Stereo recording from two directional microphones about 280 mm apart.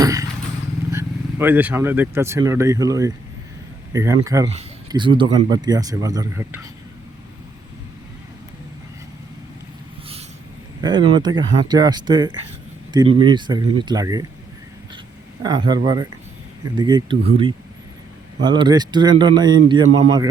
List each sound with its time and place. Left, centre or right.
0.0 s vehicle: centre
0.9 s speech: centre
10.8 s speech: centre
15.4 s speech: centre